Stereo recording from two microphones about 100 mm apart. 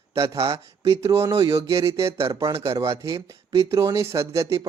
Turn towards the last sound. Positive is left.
turn(degrees=-30)  # may be behind; listen again after turning